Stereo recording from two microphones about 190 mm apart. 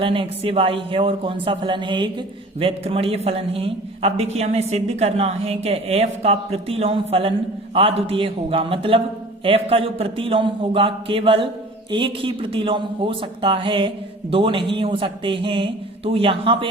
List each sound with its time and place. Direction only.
0.0 s a woman's voice: 30° right (ahead or behind)